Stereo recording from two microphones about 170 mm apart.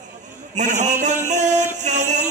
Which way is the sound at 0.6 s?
45° right (ahead or behind).